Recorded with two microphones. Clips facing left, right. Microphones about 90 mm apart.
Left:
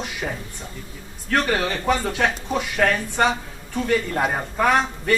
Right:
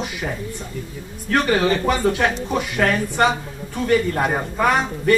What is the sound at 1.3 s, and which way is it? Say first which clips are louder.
Speech: right 4 dB; centre (ahead or behind).